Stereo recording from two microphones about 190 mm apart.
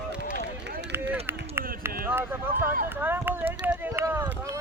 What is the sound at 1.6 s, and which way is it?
Run, 10° right (ahead or behind).